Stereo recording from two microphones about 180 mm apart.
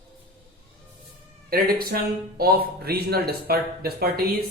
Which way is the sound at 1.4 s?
55° right (ahead or behind).